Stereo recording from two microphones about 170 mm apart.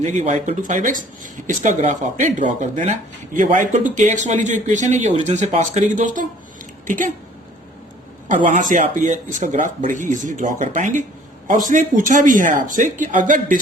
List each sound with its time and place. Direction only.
0.0 s speech: 45° right (ahead or behind)
8.7 s speech: 50° right (ahead or behind)